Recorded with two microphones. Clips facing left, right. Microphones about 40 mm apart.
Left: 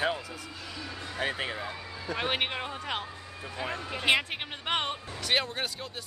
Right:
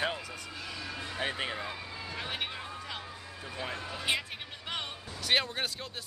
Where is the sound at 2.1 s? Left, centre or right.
Left.